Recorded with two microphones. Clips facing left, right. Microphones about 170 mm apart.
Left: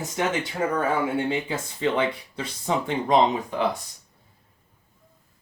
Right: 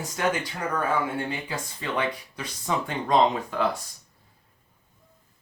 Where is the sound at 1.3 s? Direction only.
25° left (ahead or behind).